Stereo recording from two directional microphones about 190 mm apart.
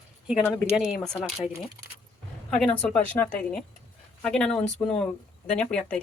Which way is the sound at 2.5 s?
5° left (ahead or behind).